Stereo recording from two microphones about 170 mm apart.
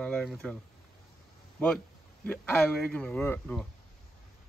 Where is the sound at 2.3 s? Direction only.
10° left (ahead or behind).